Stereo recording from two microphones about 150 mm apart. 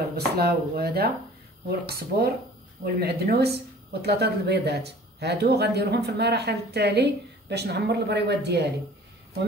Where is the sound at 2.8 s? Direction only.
90° right.